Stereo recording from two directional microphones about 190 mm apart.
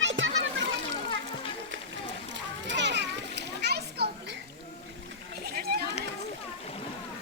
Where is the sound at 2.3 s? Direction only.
70° right (ahead or behind).